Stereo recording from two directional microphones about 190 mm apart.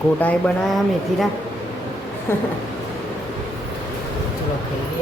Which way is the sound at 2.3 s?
10° left (ahead or behind).